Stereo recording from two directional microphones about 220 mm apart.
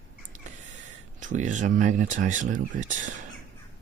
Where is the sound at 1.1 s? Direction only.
35° right (ahead or behind).